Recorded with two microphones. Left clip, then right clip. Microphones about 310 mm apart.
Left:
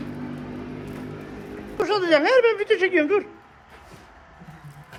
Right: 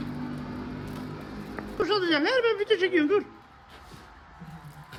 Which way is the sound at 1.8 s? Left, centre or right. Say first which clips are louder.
Left 5 dB; centre.